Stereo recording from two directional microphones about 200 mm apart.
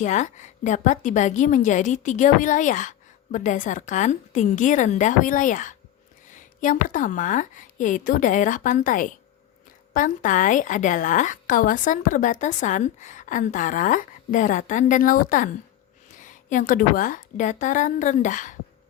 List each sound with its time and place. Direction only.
0.0 s a woman's voice: 35° left (ahead or behind)